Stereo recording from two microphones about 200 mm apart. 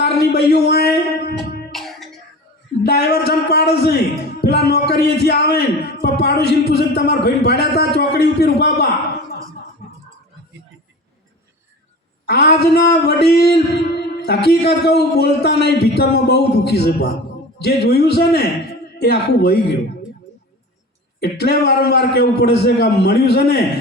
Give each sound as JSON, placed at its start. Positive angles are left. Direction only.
{"t": 0.0, "sound": "a man's voice", "side_deg": 55}
{"t": 1.7, "sound": "music", "side_deg": 0}
{"t": 2.8, "sound": "a man's voice", "side_deg": 55}
{"t": 9.8, "sound": "a sound", "side_deg": 30}
{"t": 12.2, "sound": "a sound", "side_deg": 55}
{"t": 17.6, "sound": "a man's voice", "side_deg": 50}
{"t": 21.2, "sound": "a man's voice", "side_deg": 55}